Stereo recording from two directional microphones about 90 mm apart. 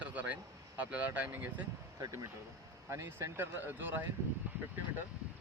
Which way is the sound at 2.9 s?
30° right (ahead or behind).